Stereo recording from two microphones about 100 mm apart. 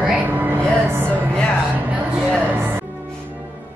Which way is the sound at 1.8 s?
15° right (ahead or behind).